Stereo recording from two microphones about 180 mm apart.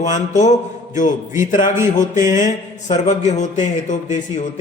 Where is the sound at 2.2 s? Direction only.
45° left (ahead or behind).